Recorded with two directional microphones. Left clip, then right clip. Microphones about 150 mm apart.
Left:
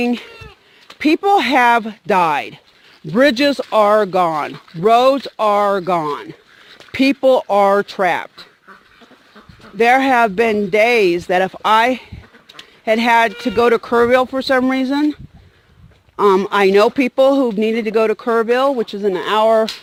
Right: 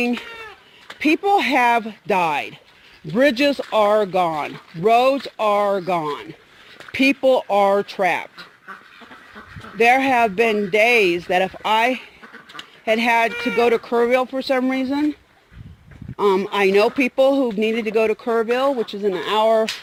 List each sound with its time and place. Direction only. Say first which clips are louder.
0.0 s speech: left 3 dB; 60° left (ahead or behind)
9.8 s speech: left 3 dB; 60° left (ahead or behind)